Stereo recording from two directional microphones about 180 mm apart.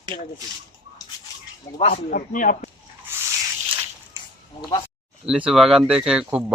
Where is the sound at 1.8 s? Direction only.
45° left (ahead or behind).